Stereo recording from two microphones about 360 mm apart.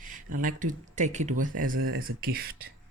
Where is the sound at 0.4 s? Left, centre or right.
Right.